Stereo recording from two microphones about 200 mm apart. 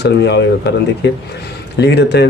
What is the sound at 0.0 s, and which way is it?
Speech, 60° left (ahead or behind).